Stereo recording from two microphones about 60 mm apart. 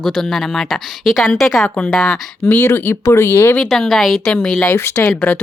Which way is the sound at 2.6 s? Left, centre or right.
Left.